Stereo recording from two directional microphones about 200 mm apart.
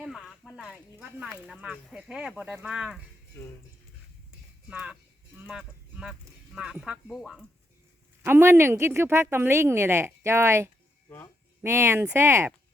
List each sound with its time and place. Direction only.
0.0 s speech: centre (ahead or behind)
3.3 s speech: 15° left (ahead or behind)
4.7 s speech: 5° right (ahead or behind)
8.2 s speech: 10° right (ahead or behind)